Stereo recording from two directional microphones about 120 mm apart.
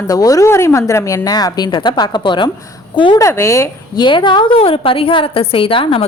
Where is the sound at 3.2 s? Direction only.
25° left (ahead or behind).